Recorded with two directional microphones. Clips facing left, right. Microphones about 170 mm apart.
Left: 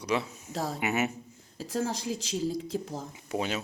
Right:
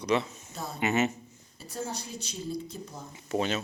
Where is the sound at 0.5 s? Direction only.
90° left.